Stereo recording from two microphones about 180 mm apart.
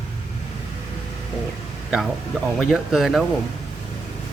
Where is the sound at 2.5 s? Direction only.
Centre (ahead or behind).